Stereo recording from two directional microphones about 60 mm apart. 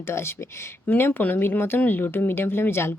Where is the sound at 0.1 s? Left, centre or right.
Left.